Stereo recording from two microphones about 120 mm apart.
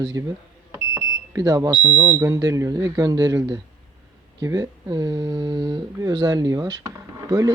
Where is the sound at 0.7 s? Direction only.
25° right (ahead or behind).